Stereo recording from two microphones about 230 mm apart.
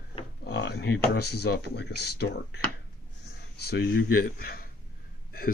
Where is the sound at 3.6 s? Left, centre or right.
Left.